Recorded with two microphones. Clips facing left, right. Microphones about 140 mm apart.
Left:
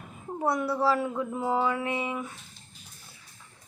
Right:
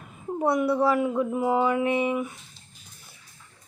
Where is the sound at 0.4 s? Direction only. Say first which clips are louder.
Right 4 dB; 20° right (ahead or behind).